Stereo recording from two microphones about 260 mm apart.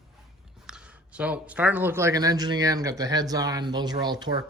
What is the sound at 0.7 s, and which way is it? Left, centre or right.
Speech, centre.